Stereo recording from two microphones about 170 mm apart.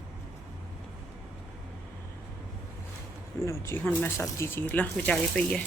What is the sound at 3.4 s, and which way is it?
Speech, 15° left (ahead or behind).